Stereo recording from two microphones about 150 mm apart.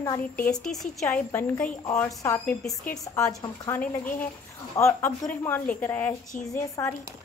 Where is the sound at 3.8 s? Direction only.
10° left (ahead or behind).